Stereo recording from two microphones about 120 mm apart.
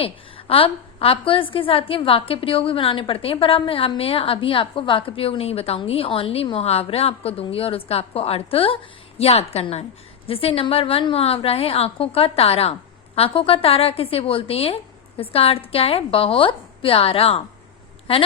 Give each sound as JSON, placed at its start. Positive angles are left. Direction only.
{"t": 0.0, "sound": "a woman's voice", "side_deg": 50}